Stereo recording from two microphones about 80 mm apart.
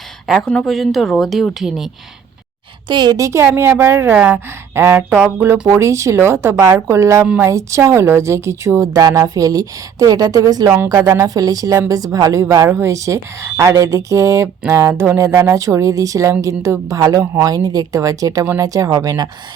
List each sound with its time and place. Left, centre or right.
0.3 s speech: centre
2.8 s a woman's voice: right
3.2 s a woman's voice: right
3.4 s a woman's voice: right
4.1 s a sound: centre
4.7 s speech: right
4.9 s a sound: right
5.6 s a woman's voice: right